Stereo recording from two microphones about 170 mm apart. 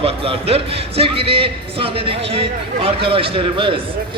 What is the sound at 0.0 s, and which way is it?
Speech, 35° right (ahead or behind).